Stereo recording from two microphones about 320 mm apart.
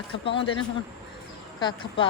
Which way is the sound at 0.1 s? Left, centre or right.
Centre.